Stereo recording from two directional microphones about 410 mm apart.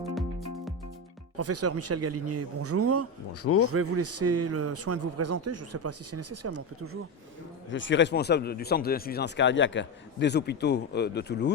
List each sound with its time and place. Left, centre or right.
0.1 s music: centre
1.4 s a man's voice: right
7.7 s speech: left